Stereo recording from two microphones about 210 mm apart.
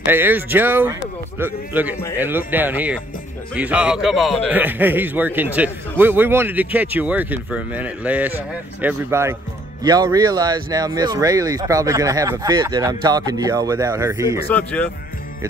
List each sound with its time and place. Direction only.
0.0 s a man's voice: 10° right (ahead or behind)
14.5 s speech: 5° left (ahead or behind)